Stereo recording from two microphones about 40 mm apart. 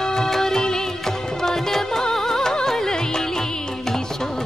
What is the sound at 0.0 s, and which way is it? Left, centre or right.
Music, centre.